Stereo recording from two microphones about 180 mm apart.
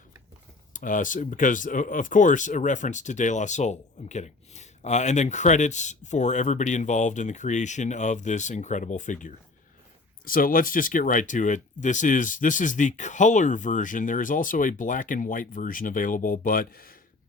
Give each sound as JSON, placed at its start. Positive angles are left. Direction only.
{"t": 0.7, "sound": "speech", "side_deg": 45}